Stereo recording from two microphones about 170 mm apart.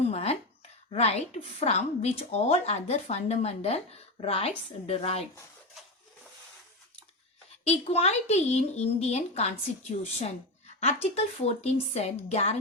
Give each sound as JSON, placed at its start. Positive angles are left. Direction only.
{"t": 0.0, "sound": "a sound", "side_deg": 40}
{"t": 0.9, "sound": "a woman's voice", "side_deg": 40}
{"t": 7.6, "sound": "a woman's voice", "side_deg": 40}